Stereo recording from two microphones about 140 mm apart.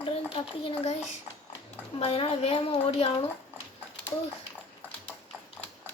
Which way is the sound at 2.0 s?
45° left (ahead or behind).